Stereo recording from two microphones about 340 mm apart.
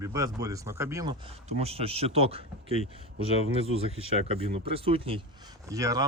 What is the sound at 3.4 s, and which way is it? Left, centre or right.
Speech, centre.